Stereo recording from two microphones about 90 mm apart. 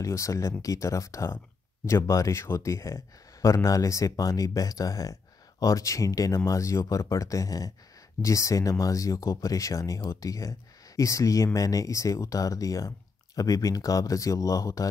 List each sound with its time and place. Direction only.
0.0 s speech: 35° left (ahead or behind)